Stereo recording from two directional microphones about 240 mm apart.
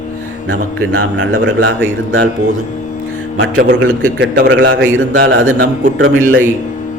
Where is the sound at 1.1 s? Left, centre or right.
Right.